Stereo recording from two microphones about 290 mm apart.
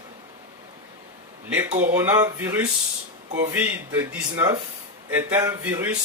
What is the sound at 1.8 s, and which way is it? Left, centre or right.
Speech, centre.